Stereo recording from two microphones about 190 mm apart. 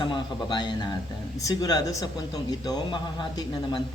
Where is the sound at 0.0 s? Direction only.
25° left (ahead or behind).